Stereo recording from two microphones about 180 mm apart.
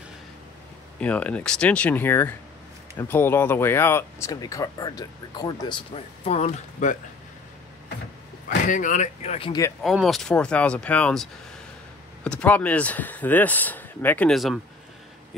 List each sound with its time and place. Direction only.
1.0 s speech: 5° left (ahead or behind); by 7.0 s 40° left (ahead or behind)
8.6 s speech: 45° left (ahead or behind)
9.8 s speech: centre (ahead or behind)